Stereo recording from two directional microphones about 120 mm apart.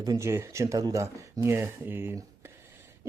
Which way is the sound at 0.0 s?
25° right (ahead or behind).